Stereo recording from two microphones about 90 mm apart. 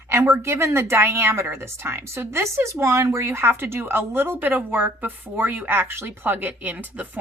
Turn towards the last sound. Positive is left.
turn(degrees=-15)  # may be behind; listen again after turning